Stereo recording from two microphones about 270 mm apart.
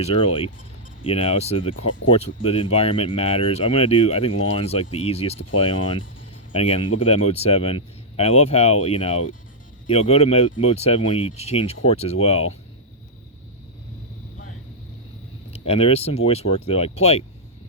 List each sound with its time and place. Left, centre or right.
0.0 s speech: left
15.4 s speech: left